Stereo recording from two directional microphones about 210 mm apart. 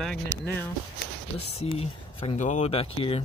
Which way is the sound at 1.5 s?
25° left (ahead or behind).